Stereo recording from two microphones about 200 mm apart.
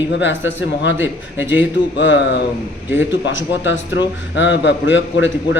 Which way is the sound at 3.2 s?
70° left (ahead or behind).